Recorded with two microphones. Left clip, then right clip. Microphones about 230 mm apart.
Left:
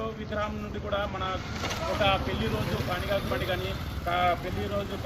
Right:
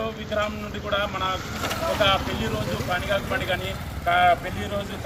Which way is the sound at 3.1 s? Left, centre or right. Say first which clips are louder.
Right 3 dB; centre.